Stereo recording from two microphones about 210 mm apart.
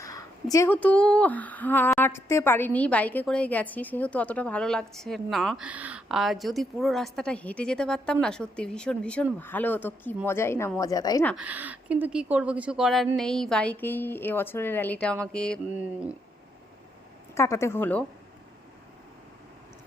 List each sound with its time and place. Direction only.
0.0 s a sound: 15° left (ahead or behind)
0.5 s a woman's voice: 10° left (ahead or behind)
11.3 s a woman's voice: 5° right (ahead or behind)
15.8 s speech: 5° right (ahead or behind)
17.3 s a woman's voice: 15° left (ahead or behind)